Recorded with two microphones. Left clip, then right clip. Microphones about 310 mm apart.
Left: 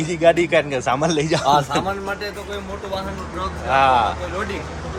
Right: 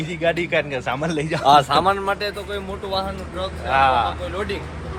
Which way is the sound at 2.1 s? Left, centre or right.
Centre.